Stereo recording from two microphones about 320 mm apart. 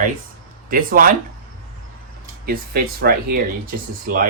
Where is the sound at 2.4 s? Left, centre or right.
Right.